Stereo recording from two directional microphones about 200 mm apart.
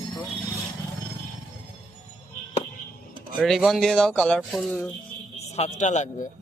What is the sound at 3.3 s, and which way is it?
Speech, centre (ahead or behind).